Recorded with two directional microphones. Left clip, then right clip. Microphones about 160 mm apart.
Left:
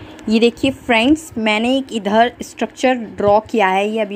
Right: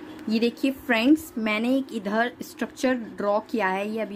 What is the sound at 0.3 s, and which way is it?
A woman's voice, 15° left (ahead or behind).